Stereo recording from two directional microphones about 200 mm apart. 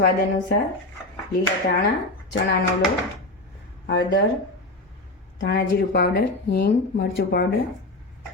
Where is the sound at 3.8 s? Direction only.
55° left (ahead or behind).